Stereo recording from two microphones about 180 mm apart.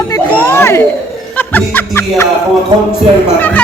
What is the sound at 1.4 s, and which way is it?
Music, 10° left (ahead or behind).